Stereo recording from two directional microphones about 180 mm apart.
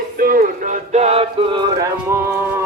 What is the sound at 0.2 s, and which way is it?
Music, 55° right (ahead or behind).